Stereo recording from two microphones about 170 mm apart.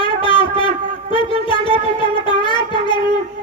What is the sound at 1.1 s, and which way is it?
Wind instrument, 30° left (ahead or behind).